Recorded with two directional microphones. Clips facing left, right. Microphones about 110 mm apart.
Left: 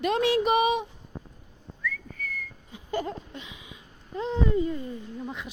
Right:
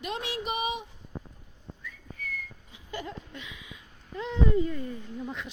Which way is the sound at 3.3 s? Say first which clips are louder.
Left 1 dB; 25° left (ahead or behind).